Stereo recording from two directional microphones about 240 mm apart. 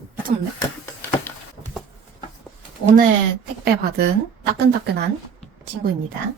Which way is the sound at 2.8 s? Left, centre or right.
Right.